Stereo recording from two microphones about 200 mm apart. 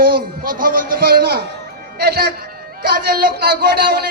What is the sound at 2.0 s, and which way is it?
A woman's voice, 50° right (ahead or behind).